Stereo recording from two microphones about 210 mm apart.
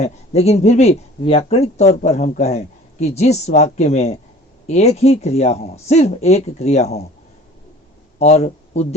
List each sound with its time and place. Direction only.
0.0 s speech: 30° left (ahead or behind)
8.2 s a man's voice: 30° left (ahead or behind)